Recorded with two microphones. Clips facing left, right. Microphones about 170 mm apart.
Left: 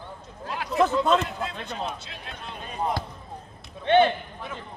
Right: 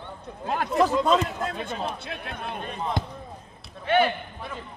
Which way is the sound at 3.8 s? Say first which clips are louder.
Left 3 dB; 30° left (ahead or behind).